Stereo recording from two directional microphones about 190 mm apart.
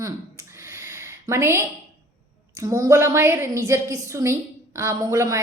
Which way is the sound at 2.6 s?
20° right (ahead or behind).